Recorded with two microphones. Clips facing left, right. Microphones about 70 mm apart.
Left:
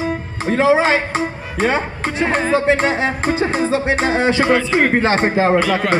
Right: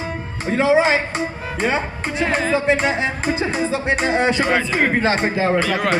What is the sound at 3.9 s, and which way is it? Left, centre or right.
Music, left.